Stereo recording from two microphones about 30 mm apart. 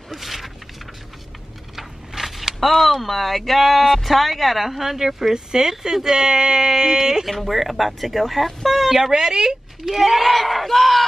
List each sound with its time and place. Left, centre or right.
0.1 s a sound: centre
1.8 s a sound: centre
2.7 s speech: centre
7.2 s speech: centre
9.1 s speech: right
9.8 s speech: centre